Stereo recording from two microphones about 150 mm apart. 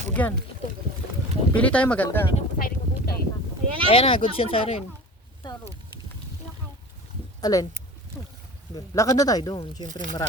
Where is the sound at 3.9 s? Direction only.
35° left (ahead or behind).